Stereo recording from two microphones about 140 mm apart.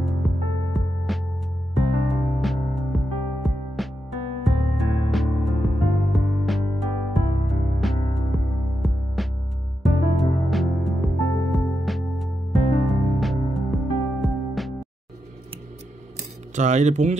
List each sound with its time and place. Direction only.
0.0 s music: centre (ahead or behind)
16.5 s speech: 55° right (ahead or behind)